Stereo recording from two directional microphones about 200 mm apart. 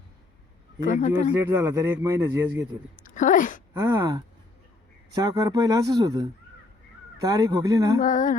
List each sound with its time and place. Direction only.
0.8 s speech: 40° left (ahead or behind)
1.4 s speech: 15° right (ahead or behind)
2.9 s a woman's voice: 40° left (ahead or behind)
3.8 s speech: 20° right (ahead or behind)
8.0 s speech: 40° left (ahead or behind)